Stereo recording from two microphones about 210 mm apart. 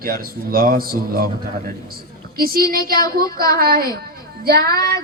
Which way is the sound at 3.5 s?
45° right (ahead or behind).